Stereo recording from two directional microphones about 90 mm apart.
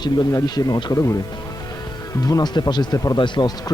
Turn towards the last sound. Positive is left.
turn(degrees=55)  # may be behind; listen again after turning